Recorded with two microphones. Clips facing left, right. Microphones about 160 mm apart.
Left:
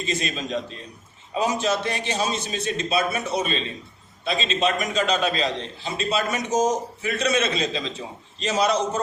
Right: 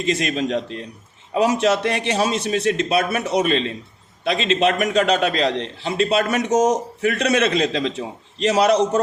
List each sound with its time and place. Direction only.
0.0 s a man's voice: 70° right (ahead or behind)